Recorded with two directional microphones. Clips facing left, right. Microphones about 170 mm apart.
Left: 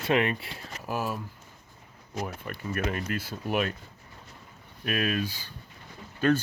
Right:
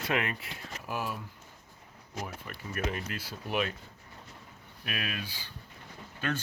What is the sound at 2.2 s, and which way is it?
Speech, 55° left (ahead or behind).